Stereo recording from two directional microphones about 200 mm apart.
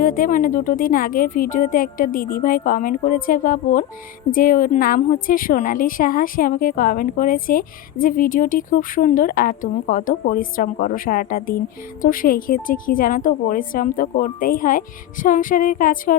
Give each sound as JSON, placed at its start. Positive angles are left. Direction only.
{"t": 0.0, "sound": "a woman's voice", "side_deg": 40}